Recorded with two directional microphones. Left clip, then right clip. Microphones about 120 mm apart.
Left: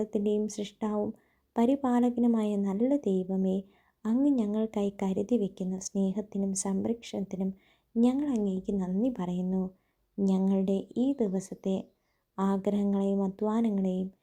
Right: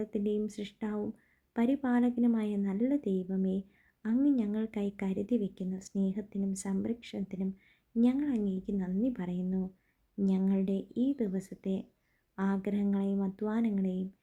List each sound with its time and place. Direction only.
0.0 s a woman's voice: 15° left (ahead or behind)